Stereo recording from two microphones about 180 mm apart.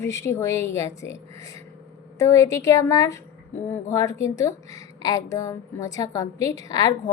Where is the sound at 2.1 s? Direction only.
15° left (ahead or behind).